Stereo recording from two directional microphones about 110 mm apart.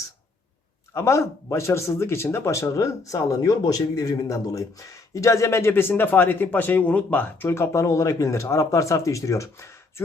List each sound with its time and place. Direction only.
0.9 s speech: 25° left (ahead or behind)